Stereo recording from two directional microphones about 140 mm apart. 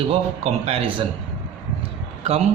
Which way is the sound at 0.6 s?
45° right (ahead or behind).